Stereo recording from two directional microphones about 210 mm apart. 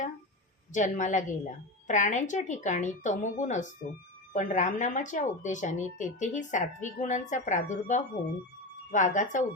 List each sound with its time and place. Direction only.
0.7 s speech: 35° left (ahead or behind)